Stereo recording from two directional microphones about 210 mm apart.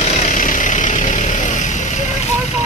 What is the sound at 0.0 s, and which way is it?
Vehicle, 35° left (ahead or behind).